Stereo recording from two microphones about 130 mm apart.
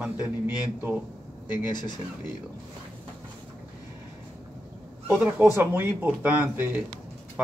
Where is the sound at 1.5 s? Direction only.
35° left (ahead or behind).